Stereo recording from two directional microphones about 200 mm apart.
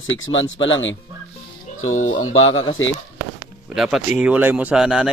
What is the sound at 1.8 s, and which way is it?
Speech, 90° left.